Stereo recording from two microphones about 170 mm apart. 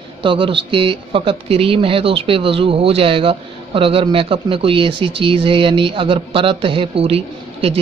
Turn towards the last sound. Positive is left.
turn(degrees=-35)  # may be behind; listen again after turning